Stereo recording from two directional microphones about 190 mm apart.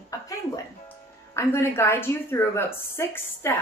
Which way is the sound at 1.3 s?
15° left (ahead or behind).